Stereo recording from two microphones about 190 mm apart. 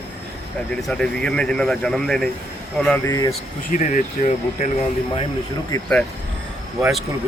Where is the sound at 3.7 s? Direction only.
45° left (ahead or behind).